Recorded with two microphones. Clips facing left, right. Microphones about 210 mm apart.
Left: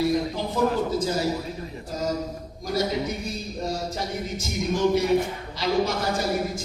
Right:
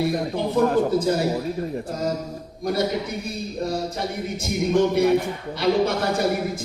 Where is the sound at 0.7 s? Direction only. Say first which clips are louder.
Right 5 dB; 60° right (ahead or behind).